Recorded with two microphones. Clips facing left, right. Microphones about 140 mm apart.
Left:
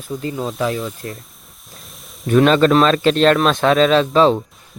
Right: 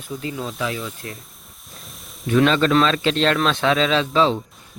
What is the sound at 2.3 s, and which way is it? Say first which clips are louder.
Speech: left 4 dB; 50° left (ahead or behind).